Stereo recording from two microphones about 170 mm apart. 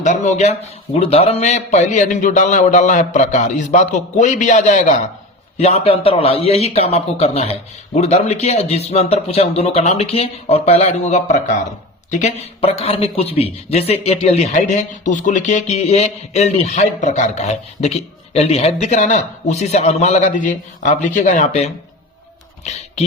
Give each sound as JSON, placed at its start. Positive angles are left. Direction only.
{"t": 0.0, "sound": "a man's voice", "side_deg": 45}